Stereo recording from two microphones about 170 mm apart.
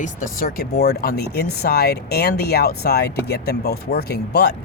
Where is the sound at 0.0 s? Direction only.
55° left (ahead or behind).